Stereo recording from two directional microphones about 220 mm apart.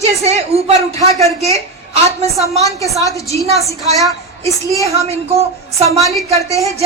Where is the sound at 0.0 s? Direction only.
30° right (ahead or behind).